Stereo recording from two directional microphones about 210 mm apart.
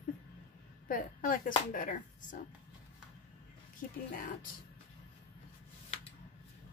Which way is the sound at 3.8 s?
40° left (ahead or behind).